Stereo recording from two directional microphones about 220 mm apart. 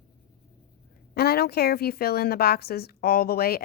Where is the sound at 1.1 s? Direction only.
45° left (ahead or behind).